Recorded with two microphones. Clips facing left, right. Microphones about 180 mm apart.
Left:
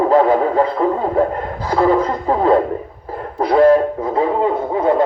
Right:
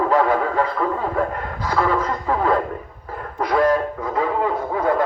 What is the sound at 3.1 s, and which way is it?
Music, 30° left (ahead or behind).